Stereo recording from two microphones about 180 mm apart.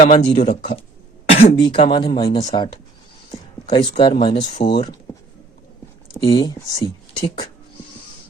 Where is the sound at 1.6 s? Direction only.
25° left (ahead or behind).